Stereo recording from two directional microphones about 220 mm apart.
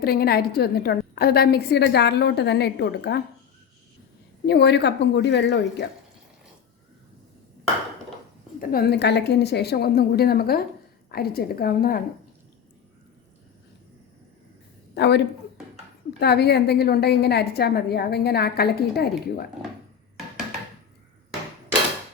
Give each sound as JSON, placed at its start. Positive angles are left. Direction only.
{"t": 0.0, "sound": "a woman's voice", "side_deg": 45}
{"t": 4.4, "sound": "a woman's voice", "side_deg": 50}
{"t": 8.7, "sound": "a woman's voice", "side_deg": 45}
{"t": 14.9, "sound": "speech", "side_deg": 50}
{"t": 16.2, "sound": "a woman's voice", "side_deg": 50}